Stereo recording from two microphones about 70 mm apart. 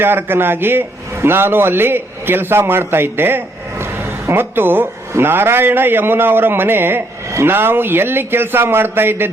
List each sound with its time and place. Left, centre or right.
0.0 s a man's voice: right